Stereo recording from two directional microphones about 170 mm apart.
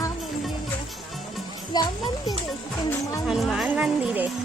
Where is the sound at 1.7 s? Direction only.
25° left (ahead or behind).